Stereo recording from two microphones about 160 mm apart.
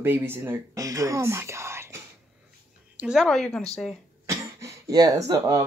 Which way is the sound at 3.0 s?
5° right (ahead or behind).